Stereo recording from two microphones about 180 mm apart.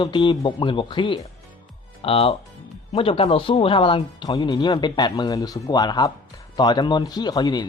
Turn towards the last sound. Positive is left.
turn(degrees=25)  # may be behind; listen again after turning